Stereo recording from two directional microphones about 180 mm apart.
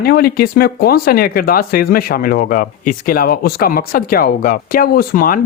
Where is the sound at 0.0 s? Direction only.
55° left (ahead or behind).